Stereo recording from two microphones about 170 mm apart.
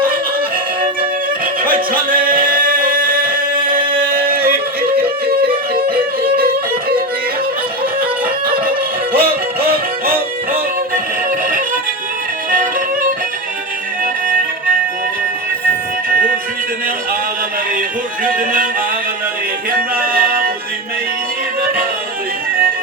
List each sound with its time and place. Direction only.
1.6 s music: 55° right (ahead or behind)
9.1 s music: 65° right (ahead or behind)
16.0 s music: 60° right (ahead or behind)
17.7 s music: 55° right (ahead or behind)
19.7 s music: 60° right (ahead or behind)